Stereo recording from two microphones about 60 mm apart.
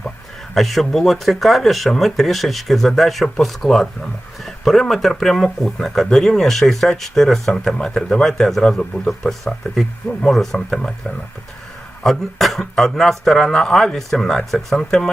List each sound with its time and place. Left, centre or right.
0.5 s speech: centre
10.3 s speech: centre
12.0 s speech: centre